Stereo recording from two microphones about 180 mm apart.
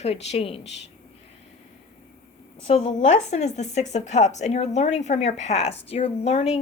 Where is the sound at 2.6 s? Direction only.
35° left (ahead or behind).